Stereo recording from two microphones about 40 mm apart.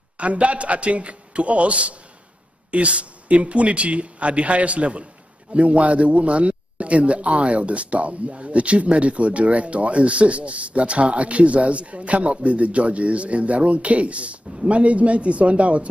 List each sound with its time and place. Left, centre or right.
0.2 s a man's voice: right